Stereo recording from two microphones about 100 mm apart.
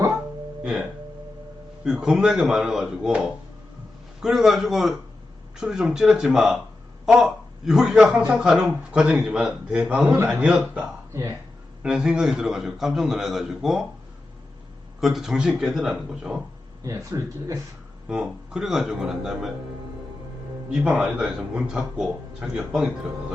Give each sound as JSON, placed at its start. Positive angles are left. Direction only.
{"t": 0.6, "sound": "a man's voice", "side_deg": -5}
{"t": 11.1, "sound": "speech", "side_deg": -30}
{"t": 11.8, "sound": "a man's voice", "side_deg": -5}
{"t": 15.0, "sound": "a man's voice", "side_deg": -5}
{"t": 16.8, "sound": "speech", "side_deg": -30}
{"t": 18.1, "sound": "a man's voice", "side_deg": -5}
{"t": 20.7, "sound": "a man's voice", "side_deg": -10}